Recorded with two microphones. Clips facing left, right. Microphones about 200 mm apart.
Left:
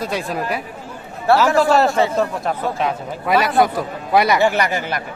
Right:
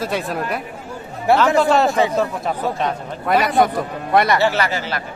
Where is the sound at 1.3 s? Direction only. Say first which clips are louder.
Left 1 dB; 15° right (ahead or behind).